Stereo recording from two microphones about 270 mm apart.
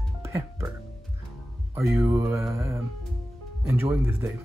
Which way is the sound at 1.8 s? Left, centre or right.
Centre.